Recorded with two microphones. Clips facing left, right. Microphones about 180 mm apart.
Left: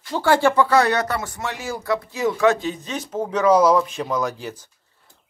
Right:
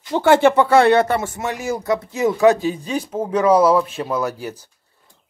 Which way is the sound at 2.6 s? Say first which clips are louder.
Right 5 dB; 10° right (ahead or behind).